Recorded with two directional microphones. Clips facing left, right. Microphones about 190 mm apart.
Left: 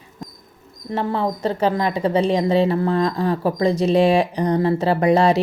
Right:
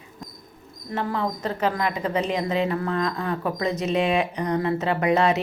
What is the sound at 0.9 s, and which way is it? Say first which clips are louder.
Speech: left 4 dB; 30° left (ahead or behind).